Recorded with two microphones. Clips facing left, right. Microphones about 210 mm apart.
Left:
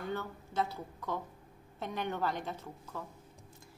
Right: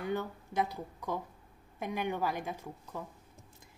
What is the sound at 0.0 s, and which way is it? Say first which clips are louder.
A woman's voice: right 3 dB; 15° right (ahead or behind).